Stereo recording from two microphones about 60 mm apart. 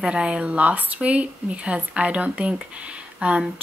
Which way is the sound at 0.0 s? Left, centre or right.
Centre.